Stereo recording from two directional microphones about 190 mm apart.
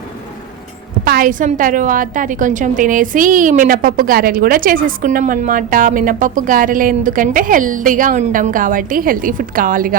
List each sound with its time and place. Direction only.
1.0 s a woman's voice: 50° right (ahead or behind)